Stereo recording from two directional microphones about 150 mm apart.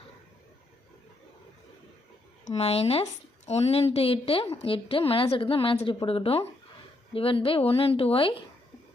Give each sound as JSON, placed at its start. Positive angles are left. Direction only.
{"t": 2.4, "sound": "a woman's voice", "side_deg": 45}